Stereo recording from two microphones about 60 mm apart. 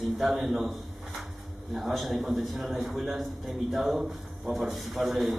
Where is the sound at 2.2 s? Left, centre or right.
Centre.